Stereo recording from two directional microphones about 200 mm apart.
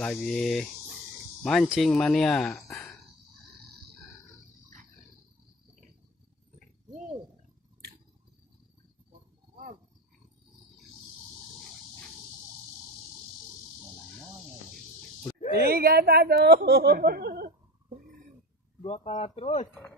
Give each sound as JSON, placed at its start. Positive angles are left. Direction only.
{"t": 0.0, "sound": "speech", "side_deg": 0}
{"t": 14.7, "sound": "cricket", "side_deg": 5}
{"t": 15.5, "sound": "speech", "side_deg": -50}
{"t": 18.8, "sound": "speech", "side_deg": 30}